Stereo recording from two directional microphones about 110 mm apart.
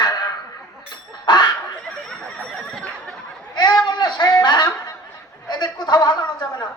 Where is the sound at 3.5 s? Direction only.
40° left (ahead or behind).